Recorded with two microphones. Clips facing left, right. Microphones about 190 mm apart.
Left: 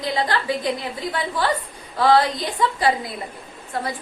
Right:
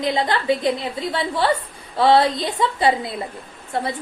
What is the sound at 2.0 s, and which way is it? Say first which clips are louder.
A woman's voice: right 2 dB; 25° right (ahead or behind).